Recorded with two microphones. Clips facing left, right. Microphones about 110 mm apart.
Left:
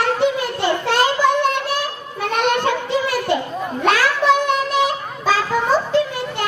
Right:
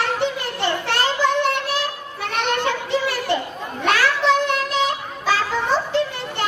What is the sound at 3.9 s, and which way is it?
Child singing, 10° left (ahead or behind).